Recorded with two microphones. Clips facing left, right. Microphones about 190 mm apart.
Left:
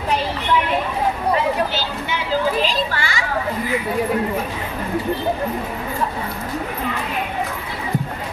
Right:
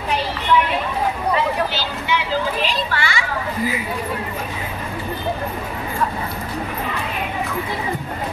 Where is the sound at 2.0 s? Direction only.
40° left (ahead or behind).